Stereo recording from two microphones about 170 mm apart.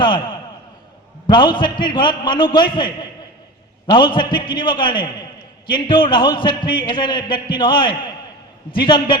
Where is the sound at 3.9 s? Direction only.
30° left (ahead or behind).